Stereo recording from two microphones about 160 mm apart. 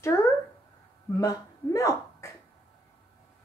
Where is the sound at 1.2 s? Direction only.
20° left (ahead or behind).